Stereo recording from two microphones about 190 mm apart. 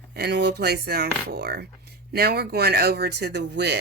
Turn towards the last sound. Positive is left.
turn(degrees=-60)  # may be behind; listen again after turning